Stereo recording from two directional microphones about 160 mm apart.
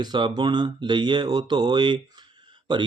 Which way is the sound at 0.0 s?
30° right (ahead or behind).